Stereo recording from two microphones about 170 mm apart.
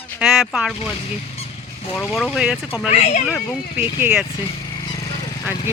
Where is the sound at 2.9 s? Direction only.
40° left (ahead or behind).